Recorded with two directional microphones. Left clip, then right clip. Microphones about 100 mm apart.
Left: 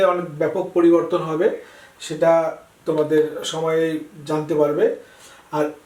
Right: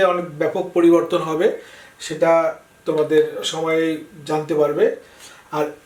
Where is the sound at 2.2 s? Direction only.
5° left (ahead or behind).